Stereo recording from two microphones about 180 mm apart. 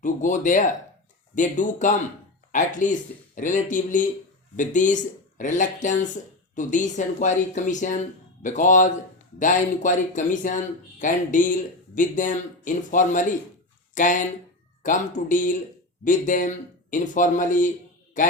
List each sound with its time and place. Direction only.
0.0 s speech: 45° left (ahead or behind)